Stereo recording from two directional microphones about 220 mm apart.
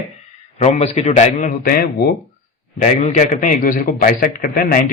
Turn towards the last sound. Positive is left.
turn(degrees=40)  # may be behind; listen again after turning